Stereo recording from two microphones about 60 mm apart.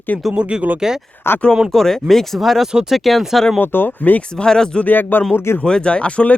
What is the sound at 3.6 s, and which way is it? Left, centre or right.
Speech, left.